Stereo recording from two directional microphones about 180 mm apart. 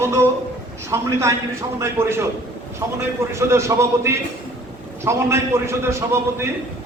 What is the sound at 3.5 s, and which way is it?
A man's voice, 15° right (ahead or behind).